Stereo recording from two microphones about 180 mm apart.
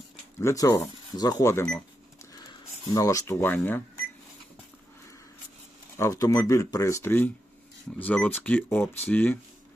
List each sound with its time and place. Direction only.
0.3 s speech: 15° left (ahead or behind)
6.0 s speech: 15° left (ahead or behind)